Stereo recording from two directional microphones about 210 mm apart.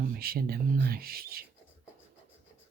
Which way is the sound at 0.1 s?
45° right (ahead or behind).